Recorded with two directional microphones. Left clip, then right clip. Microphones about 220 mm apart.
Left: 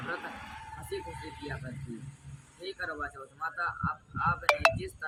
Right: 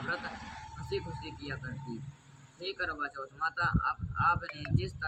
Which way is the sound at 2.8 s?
15° right (ahead or behind).